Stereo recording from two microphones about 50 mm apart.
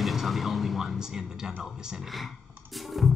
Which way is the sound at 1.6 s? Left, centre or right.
Centre.